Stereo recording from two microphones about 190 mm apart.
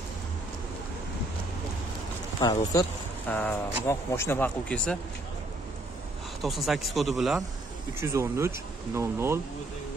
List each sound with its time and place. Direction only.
2.4 s speech: 20° left (ahead or behind)
3.3 s speech: 10° left (ahead or behind)
6.4 s speech: centre (ahead or behind)
8.0 s speech: 15° right (ahead or behind)